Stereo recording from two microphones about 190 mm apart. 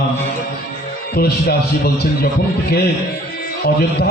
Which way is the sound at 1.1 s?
55° left (ahead or behind).